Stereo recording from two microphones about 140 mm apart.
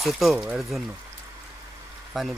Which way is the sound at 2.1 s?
Centre (ahead or behind).